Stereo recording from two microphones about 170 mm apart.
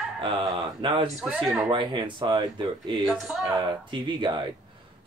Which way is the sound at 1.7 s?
30° right (ahead or behind).